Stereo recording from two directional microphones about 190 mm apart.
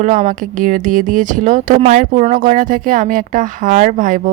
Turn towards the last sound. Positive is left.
turn(degrees=-45)  # may be behind; listen again after turning